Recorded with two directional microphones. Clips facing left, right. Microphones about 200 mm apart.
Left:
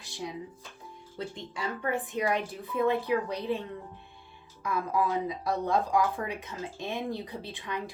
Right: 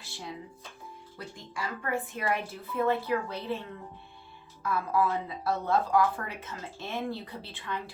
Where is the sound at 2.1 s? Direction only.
15° left (ahead or behind).